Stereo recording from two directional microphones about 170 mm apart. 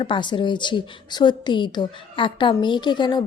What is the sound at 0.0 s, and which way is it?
A woman's voice, 30° left (ahead or behind).